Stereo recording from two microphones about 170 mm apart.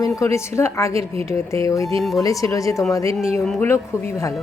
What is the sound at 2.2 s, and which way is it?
A woman's voice, 20° left (ahead or behind).